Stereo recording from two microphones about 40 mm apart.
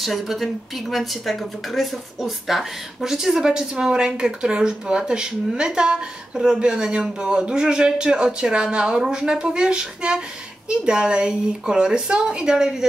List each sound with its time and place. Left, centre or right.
0.0 s a woman's voice: centre